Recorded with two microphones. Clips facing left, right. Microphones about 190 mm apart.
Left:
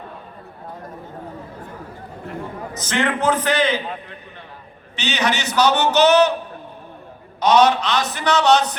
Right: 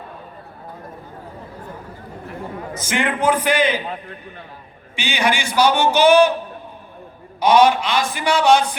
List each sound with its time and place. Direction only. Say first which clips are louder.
2.7 s a man's voice: left 1 dB; 10° right (ahead or behind)
4.9 s a man's voice: right 1 dB; 10° right (ahead or behind)
7.4 s a man's voice: right 1 dB; 10° right (ahead or behind)